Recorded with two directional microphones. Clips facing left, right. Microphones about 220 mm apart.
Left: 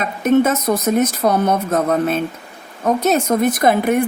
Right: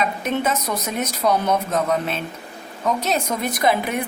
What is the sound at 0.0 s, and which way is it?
A woman's voice, 50° left (ahead or behind).